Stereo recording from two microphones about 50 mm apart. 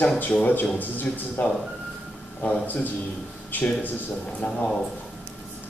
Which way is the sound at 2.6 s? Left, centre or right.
Left.